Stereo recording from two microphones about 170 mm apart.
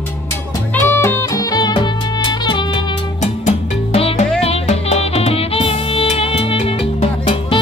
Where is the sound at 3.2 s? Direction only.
40° left (ahead or behind).